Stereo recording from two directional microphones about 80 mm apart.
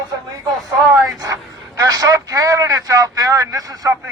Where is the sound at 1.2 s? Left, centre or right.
Right.